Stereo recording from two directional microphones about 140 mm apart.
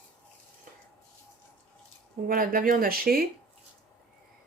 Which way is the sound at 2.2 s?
90° right.